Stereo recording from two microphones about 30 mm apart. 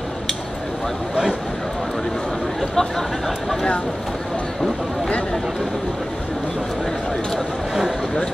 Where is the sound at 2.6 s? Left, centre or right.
Centre.